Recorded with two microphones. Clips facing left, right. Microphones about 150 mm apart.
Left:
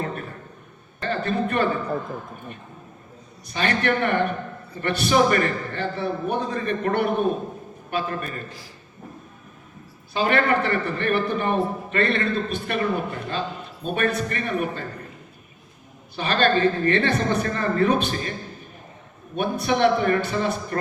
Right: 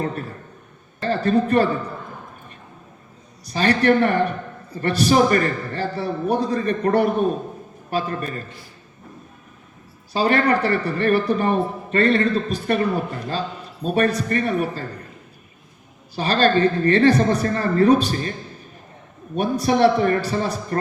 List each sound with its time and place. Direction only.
1.0 s a man's voice: 40° right (ahead or behind)
3.4 s a man's voice: 35° right (ahead or behind)
10.1 s a man's voice: 35° right (ahead or behind)
16.1 s a man's voice: 40° right (ahead or behind)
19.4 s a man's voice: 35° right (ahead or behind)